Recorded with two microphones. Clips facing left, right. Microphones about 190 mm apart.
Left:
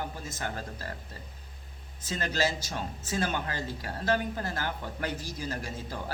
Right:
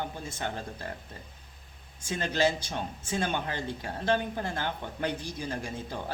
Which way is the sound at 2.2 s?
20° right (ahead or behind).